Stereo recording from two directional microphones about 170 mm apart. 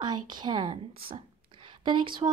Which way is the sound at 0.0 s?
25° right (ahead or behind).